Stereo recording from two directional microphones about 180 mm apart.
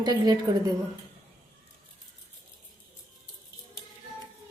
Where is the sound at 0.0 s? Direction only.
20° right (ahead or behind).